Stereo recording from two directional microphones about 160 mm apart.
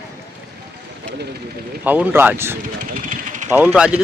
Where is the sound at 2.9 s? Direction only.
55° right (ahead or behind).